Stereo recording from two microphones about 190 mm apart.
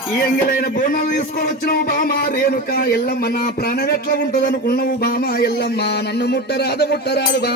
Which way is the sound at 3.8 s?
55° left (ahead or behind).